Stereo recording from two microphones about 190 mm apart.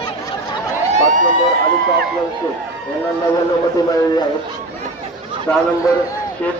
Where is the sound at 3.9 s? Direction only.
20° left (ahead or behind).